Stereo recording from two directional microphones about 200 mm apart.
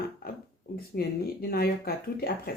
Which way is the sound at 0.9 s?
50° left (ahead or behind).